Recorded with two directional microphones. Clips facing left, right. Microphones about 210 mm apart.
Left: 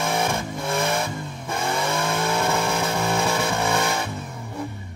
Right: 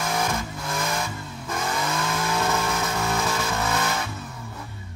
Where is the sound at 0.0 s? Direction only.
30° left (ahead or behind).